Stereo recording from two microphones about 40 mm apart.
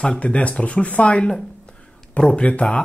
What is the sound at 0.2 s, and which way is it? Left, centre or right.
Speech, left.